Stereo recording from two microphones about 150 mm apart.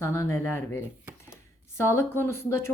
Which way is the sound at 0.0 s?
15° left (ahead or behind).